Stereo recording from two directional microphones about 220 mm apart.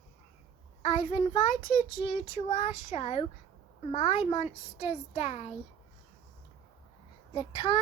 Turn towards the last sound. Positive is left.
turn(degrees=20)  # may be behind; listen again after turning